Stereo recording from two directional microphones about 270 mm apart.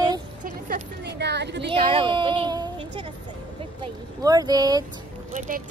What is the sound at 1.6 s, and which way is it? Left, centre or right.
Speech, centre.